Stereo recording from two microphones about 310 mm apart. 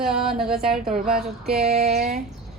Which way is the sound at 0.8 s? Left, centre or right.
Right.